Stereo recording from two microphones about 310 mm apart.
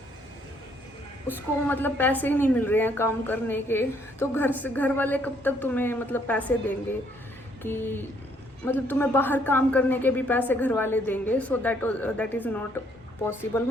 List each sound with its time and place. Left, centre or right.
1.6 s a woman's voice: centre